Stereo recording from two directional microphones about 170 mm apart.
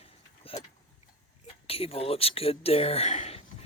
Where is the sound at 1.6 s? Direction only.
35° left (ahead or behind).